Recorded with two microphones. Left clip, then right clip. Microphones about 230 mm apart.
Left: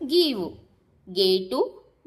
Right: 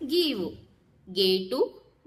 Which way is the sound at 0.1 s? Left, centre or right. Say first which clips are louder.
Left 4 dB; centre.